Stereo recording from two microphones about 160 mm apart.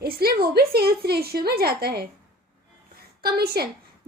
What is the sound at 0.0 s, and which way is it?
A woman's voice, 75° right (ahead or behind).